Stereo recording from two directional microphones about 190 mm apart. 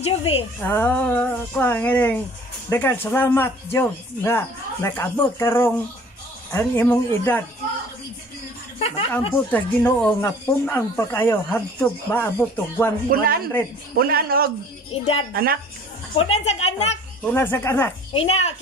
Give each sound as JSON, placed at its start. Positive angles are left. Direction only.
{"t": 0.0, "sound": "a woman's voice", "side_deg": 30}
{"t": 0.7, "sound": "speech", "side_deg": 10}
{"t": 8.7, "sound": "a sound", "side_deg": 30}
{"t": 9.5, "sound": "speech", "side_deg": 10}
{"t": 13.1, "sound": "a man's voice", "side_deg": -50}
{"t": 14.9, "sound": "a woman's voice", "side_deg": 30}
{"t": 15.3, "sound": "a man's voice", "side_deg": -50}
{"t": 16.2, "sound": "a woman's voice", "side_deg": 35}
{"t": 17.3, "sound": "speech", "side_deg": 10}
{"t": 18.1, "sound": "a woman's voice", "side_deg": 35}